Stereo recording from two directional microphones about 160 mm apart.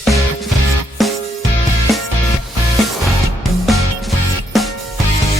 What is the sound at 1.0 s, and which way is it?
Music, centre (ahead or behind).